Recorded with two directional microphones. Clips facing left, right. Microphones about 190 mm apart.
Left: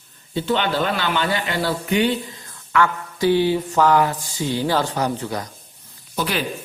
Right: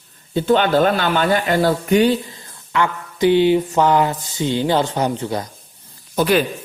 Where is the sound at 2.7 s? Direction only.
20° right (ahead or behind).